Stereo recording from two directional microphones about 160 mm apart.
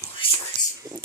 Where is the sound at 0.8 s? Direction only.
55° right (ahead or behind).